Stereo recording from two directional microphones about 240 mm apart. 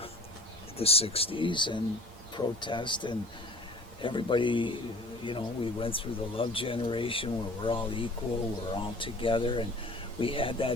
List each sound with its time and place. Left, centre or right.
0.8 s speech: left